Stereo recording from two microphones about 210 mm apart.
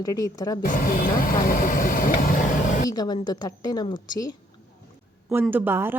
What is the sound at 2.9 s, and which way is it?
Speech, 20° left (ahead or behind).